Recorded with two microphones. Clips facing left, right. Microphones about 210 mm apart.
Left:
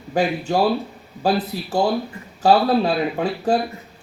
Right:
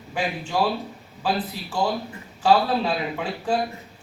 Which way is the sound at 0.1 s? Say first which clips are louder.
Left 7 dB; 40° left (ahead or behind).